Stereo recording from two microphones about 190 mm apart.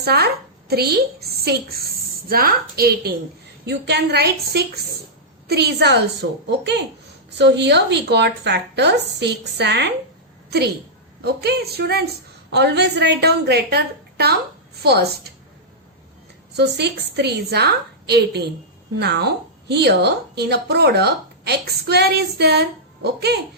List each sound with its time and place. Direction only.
0.0 s a woman's voice: 55° right (ahead or behind)
11.2 s a woman's voice: 60° right (ahead or behind)
16.6 s a woman's voice: 60° right (ahead or behind)